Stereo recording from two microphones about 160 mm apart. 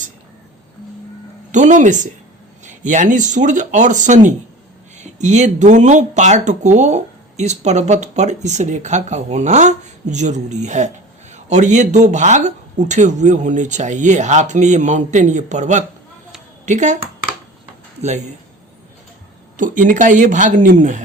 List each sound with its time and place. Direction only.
1.5 s speech: 50° right (ahead or behind)
19.5 s speech: 55° right (ahead or behind)